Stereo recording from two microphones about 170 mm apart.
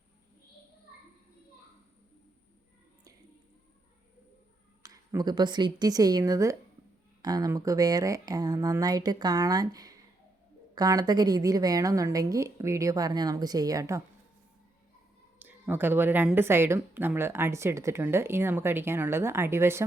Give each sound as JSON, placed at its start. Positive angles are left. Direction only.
{"t": 4.8, "sound": "a woman's voice", "side_deg": -20}
{"t": 15.4, "sound": "a woman's voice", "side_deg": -10}